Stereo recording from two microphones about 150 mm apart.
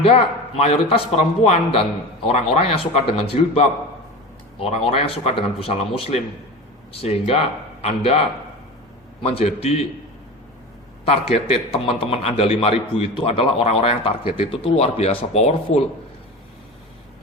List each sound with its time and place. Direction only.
0.0 s a man's voice: 40° left (ahead or behind)
9.2 s a man's voice: 40° left (ahead or behind)
11.0 s a man's voice: 40° left (ahead or behind)